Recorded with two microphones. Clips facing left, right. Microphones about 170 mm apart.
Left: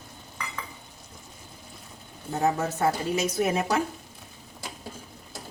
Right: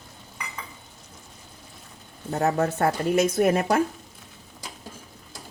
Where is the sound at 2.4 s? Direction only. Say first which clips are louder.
Right 2 dB; 60° right (ahead or behind).